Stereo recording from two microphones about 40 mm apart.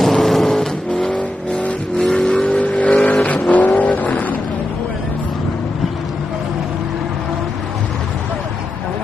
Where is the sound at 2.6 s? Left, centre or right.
Left.